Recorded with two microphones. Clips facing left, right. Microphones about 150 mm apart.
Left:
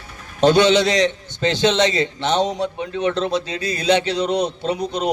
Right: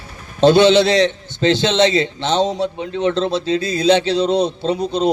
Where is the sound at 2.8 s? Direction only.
25° right (ahead or behind).